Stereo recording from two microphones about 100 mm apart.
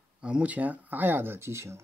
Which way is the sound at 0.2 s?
10° right (ahead or behind).